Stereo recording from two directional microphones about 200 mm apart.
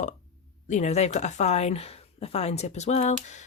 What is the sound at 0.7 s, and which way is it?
Speech, 35° left (ahead or behind).